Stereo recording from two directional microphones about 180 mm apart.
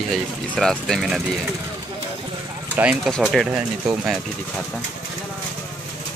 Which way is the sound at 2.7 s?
10° right (ahead or behind).